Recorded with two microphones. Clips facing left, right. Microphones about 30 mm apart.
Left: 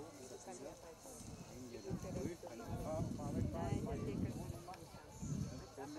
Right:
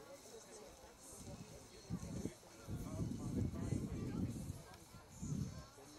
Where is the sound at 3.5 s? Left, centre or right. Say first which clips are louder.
Left 3 dB; left.